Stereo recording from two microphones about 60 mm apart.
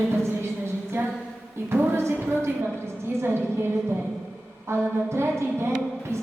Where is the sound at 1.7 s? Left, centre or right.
Right.